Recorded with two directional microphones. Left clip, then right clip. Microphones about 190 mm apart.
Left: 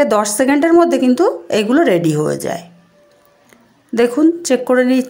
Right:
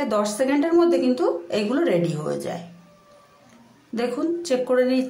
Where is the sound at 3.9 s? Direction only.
40° left (ahead or behind).